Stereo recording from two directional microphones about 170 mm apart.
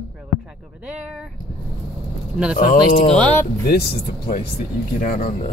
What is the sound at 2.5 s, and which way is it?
Speech, 55° left (ahead or behind).